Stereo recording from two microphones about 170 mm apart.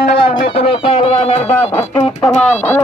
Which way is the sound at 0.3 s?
30° left (ahead or behind).